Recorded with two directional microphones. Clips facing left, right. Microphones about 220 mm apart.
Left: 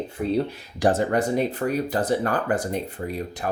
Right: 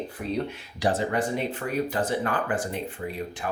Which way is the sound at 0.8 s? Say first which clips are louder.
Left 4 dB; 45° left (ahead or behind).